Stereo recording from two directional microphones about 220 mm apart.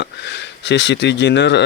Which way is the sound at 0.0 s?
55° left (ahead or behind).